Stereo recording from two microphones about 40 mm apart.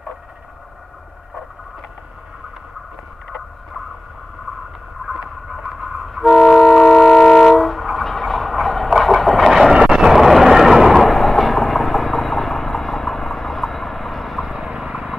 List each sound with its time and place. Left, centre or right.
3.3 s vehicle: centre
5.0 s a sound: centre
5.9 s train: centre
9.5 s vehicle: centre
9.8 s a sound: centre
14.5 s vehicle: centre